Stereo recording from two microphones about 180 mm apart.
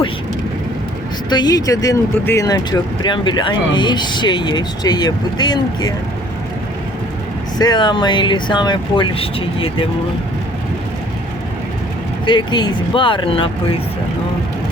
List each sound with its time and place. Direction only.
1.3 s speech: 20° left (ahead or behind)
7.6 s speech: 25° left (ahead or behind)
12.2 s speech: 25° left (ahead or behind)